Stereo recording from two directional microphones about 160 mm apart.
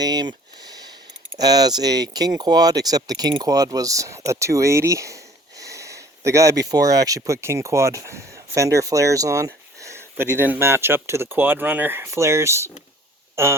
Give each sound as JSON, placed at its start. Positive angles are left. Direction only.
{"t": 0.0, "sound": "speech", "side_deg": -25}